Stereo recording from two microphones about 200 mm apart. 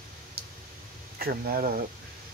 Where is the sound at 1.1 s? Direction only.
45° right (ahead or behind).